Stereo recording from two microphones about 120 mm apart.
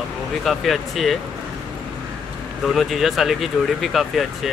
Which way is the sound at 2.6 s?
Centre (ahead or behind).